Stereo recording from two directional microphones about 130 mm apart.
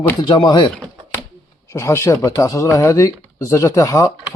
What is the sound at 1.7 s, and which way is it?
Speech, 20° left (ahead or behind).